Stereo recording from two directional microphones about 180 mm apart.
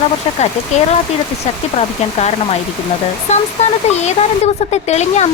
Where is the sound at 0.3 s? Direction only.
35° left (ahead or behind).